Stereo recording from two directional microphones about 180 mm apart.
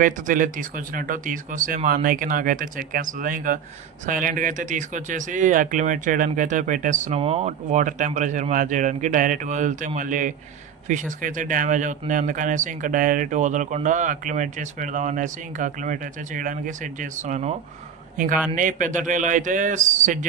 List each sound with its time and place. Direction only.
0.0 s a man's voice: 50° right (ahead or behind)